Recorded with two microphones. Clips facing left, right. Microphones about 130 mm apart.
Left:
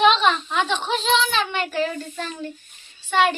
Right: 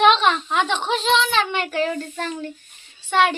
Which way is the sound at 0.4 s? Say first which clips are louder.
Right 2 dB; 20° right (ahead or behind).